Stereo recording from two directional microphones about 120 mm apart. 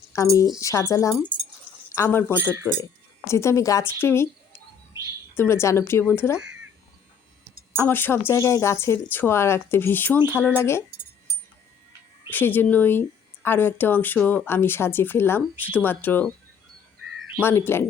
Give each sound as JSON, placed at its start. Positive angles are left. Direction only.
{"t": 0.1, "sound": "speech", "side_deg": 25}
{"t": 2.3, "sound": "speech", "side_deg": -20}
{"t": 3.2, "sound": "a woman's voice", "side_deg": 25}
{"t": 7.8, "sound": "speech", "side_deg": 15}
{"t": 12.3, "sound": "speech", "side_deg": 15}
{"t": 17.4, "sound": "speech", "side_deg": 20}